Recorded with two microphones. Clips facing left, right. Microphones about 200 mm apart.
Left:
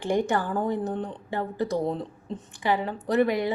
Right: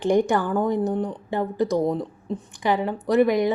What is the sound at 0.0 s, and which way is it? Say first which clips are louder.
A woman's voice: right 5 dB; 15° right (ahead or behind).